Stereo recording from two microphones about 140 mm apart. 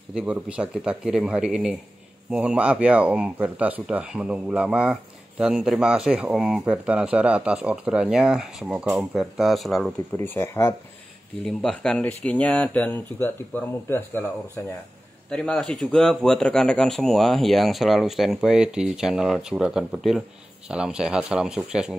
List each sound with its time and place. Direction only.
0.1 s speech: 10° right (ahead or behind)
10.1 s speech: 15° left (ahead or behind)
11.4 s speech: 5° left (ahead or behind)